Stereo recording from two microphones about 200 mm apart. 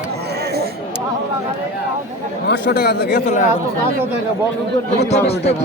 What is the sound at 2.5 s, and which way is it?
Speech, 55° left (ahead or behind).